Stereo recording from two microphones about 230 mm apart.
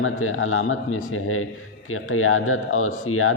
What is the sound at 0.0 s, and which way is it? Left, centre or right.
A man's voice, left.